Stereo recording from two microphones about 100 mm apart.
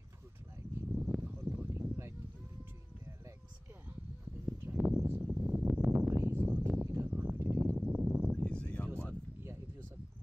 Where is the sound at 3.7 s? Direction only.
15° right (ahead or behind).